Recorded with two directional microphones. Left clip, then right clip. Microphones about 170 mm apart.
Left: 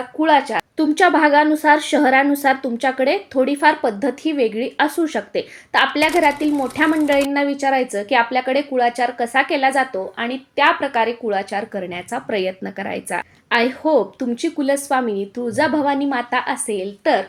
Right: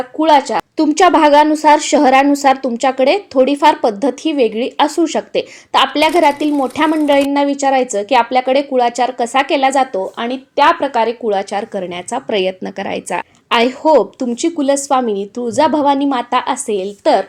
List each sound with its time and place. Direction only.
0.2 s a woman's voice: 40° right (ahead or behind)
6.5 s a woman's voice: centre (ahead or behind)
7.3 s a woman's voice: 35° right (ahead or behind)